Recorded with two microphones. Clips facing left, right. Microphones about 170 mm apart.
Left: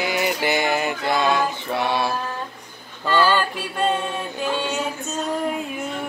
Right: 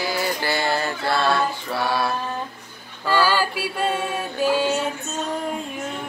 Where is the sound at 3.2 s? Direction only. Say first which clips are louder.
Left 1 dB; 10° right (ahead or behind).